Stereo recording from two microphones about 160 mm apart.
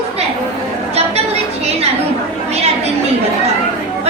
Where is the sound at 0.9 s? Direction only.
40° right (ahead or behind).